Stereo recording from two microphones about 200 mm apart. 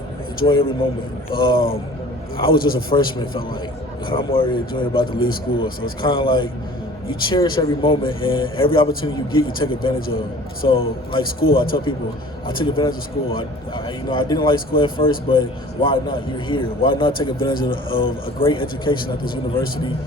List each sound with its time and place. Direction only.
0.3 s a man's voice: 25° left (ahead or behind)